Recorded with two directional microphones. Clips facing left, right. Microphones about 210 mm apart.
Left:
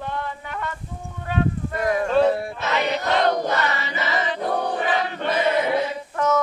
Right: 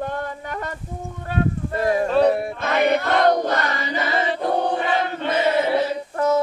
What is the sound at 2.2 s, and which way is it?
Choir, 20° right (ahead or behind).